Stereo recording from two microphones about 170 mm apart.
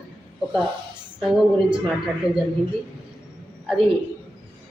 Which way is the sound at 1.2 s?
5° right (ahead or behind).